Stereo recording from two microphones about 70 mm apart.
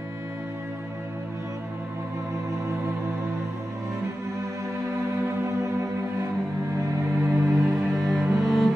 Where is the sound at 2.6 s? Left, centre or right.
Right.